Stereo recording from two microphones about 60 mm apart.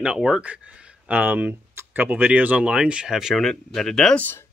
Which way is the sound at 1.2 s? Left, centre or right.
Right.